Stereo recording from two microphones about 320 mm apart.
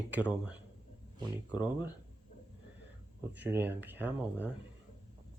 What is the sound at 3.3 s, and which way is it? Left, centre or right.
Speech, centre.